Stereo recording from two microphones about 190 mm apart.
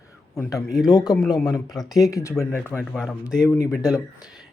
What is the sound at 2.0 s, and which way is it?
Speech, 15° left (ahead or behind).